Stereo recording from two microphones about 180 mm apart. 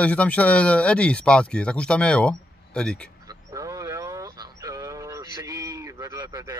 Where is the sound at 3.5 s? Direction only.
20° right (ahead or behind).